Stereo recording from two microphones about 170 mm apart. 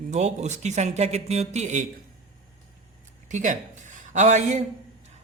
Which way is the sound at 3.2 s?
45° right (ahead or behind).